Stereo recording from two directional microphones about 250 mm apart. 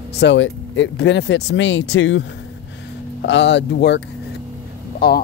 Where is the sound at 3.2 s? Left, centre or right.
Left.